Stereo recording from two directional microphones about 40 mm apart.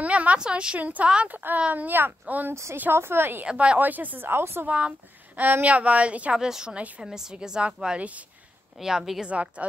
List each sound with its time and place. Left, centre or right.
0.0 s a sound: right
0.4 s a woman's voice: right
0.7 s a woman's voice: right
2.9 s a woman's voice: right
3.5 s a woman's voice: right
3.8 s speech: right
4.2 s a woman's voice: right
4.6 s a woman's voice: right
5.3 s a woman's voice: right
6.3 s a woman's voice: centre
8.7 s a woman's voice: centre
9.3 s a woman's voice: right